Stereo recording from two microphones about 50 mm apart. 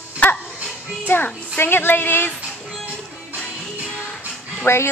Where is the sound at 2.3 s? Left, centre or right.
Right.